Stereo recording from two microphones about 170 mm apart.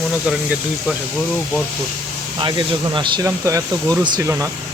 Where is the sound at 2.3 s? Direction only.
25° right (ahead or behind).